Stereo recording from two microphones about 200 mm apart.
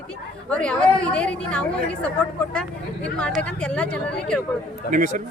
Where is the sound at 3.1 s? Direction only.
5° left (ahead or behind).